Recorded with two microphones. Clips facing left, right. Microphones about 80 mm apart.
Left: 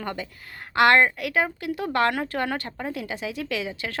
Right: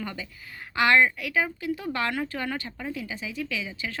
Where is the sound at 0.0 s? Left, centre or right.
Left.